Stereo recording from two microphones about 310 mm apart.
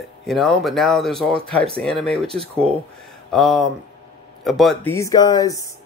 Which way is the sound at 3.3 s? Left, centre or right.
Centre.